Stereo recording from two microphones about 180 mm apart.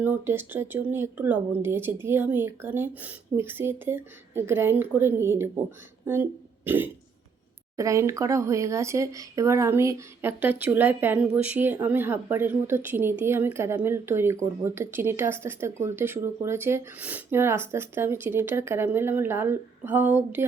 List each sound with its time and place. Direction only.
0.0 s speech: 10° right (ahead or behind)
6.7 s speech: 10° right (ahead or behind)